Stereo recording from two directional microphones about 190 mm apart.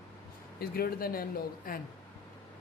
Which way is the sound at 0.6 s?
50° left (ahead or behind).